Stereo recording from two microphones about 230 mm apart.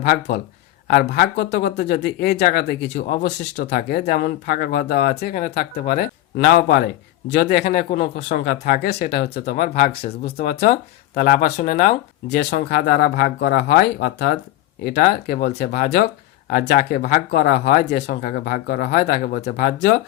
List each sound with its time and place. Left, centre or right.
0.0 s speech: left